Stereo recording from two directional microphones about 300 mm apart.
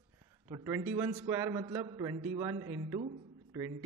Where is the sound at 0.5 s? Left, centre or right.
Centre.